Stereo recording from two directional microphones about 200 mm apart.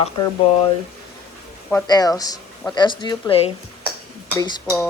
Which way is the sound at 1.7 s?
15° left (ahead or behind).